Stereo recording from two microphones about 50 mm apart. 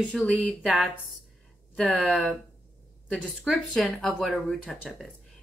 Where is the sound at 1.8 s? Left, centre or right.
Centre.